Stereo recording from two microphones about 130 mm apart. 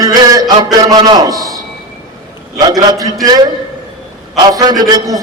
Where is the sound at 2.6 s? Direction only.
30° right (ahead or behind).